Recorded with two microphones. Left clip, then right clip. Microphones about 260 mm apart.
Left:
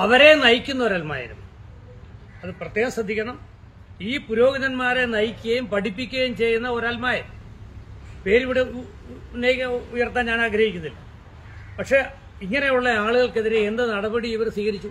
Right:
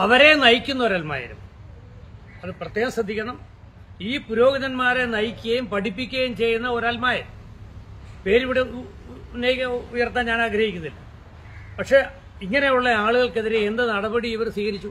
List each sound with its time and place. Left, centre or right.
0.0 s a man's voice: centre
2.4 s a man's voice: centre
8.2 s a man's voice: centre